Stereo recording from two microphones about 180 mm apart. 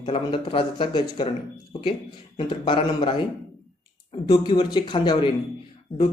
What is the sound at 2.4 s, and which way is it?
Speech, 30° left (ahead or behind).